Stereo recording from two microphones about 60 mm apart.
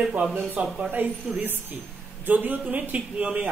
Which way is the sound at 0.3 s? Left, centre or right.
Right.